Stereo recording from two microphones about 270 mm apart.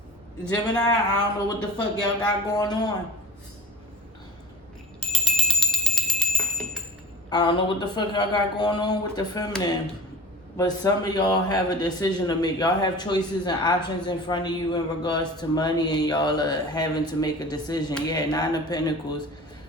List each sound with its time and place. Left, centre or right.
0.5 s a man's voice: centre
2.5 s a man's voice: centre
4.9 s bell: centre
7.3 s a man's voice: centre